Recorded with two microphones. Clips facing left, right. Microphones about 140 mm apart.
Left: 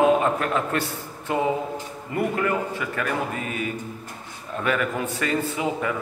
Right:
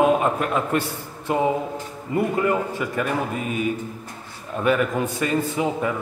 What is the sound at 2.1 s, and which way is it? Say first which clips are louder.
Speech: right 3 dB; 20° right (ahead or behind).